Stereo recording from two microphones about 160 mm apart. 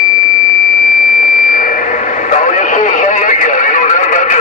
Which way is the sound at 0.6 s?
55° left (ahead or behind).